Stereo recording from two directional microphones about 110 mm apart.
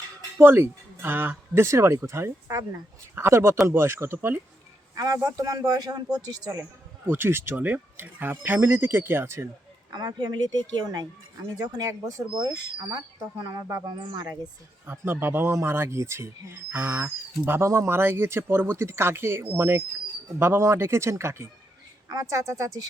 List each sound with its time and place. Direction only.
0.3 s a man's voice: 20° right (ahead or behind); by 6.6 s 35° right (ahead or behind)
7.1 s speech: 20° right (ahead or behind)
9.9 s a man's voice: 40° right (ahead or behind)
13.4 s a man's voice: 35° right (ahead or behind)
14.8 s speech: 20° right (ahead or behind)